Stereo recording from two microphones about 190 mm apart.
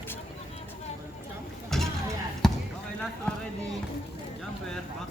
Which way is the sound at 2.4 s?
5° left (ahead or behind).